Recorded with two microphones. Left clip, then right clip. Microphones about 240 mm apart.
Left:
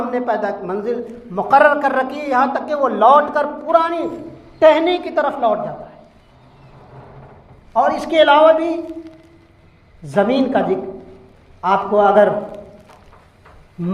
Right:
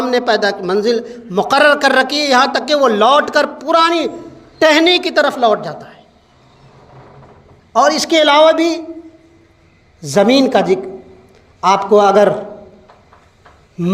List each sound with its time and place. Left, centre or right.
0.2 s a man's voice: right
1.4 s a man's voice: right
7.7 s a man's voice: right
10.0 s a man's voice: right